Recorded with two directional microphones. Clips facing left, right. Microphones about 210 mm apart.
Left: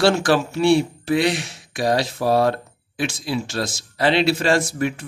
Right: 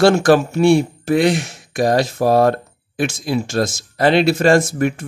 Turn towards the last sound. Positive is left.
turn(degrees=-45)  # may be behind; listen again after turning